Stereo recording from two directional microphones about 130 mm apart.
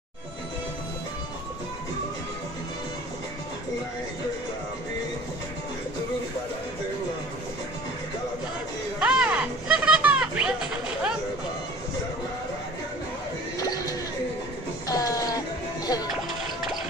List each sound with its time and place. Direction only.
9.0 s music: 10° right (ahead or behind)
13.6 s music: 30° left (ahead or behind)